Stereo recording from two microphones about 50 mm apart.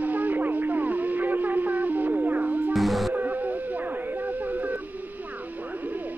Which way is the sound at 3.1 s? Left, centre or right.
Right.